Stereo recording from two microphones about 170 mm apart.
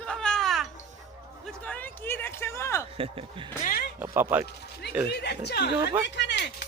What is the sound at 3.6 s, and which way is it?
Speech, 60° left (ahead or behind).